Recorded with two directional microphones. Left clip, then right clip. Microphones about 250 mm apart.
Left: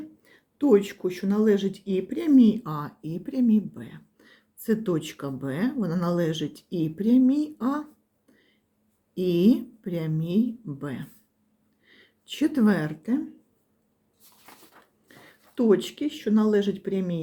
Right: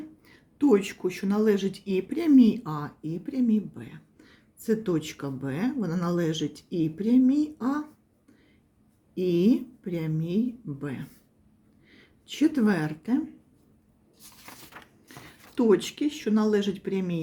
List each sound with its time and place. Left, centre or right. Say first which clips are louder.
0.3 s speech: left 2 dB; centre
9.1 s speech: left 1 dB; centre
14.8 s a sound: right 8 dB; right
15.5 s speech: even; centre